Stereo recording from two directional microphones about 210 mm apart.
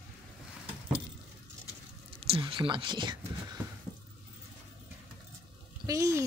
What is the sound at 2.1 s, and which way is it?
Speech, 25° right (ahead or behind).